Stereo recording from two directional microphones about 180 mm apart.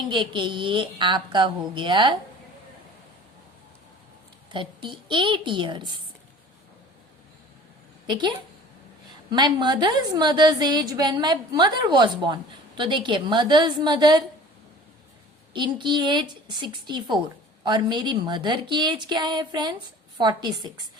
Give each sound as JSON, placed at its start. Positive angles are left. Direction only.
{"t": 0.1, "sound": "a woman's voice", "side_deg": -25}
{"t": 4.5, "sound": "a woman's voice", "side_deg": -25}
{"t": 8.0, "sound": "a woman's voice", "side_deg": -25}
{"t": 9.3, "sound": "a woman's voice", "side_deg": -25}
{"t": 15.5, "sound": "a woman's voice", "side_deg": -25}